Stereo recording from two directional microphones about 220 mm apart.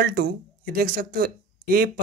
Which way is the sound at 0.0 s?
45° right (ahead or behind).